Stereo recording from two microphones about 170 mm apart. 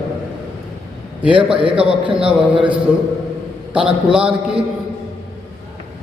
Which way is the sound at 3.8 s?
5° right (ahead or behind).